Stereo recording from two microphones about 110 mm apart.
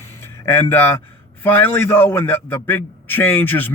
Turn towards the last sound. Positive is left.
turn(degrees=15)  # may be behind; listen again after turning